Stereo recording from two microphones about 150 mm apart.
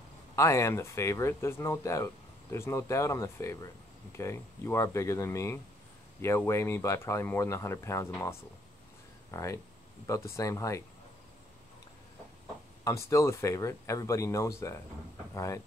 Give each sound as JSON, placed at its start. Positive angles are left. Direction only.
{"t": 0.4, "sound": "speech", "side_deg": 20}
{"t": 12.8, "sound": "speech", "side_deg": 20}